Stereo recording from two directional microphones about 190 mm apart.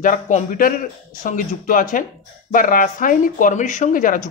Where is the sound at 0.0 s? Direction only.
40° left (ahead or behind).